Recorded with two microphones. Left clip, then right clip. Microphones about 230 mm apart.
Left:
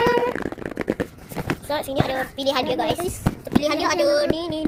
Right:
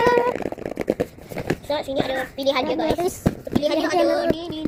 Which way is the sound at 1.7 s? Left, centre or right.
Left.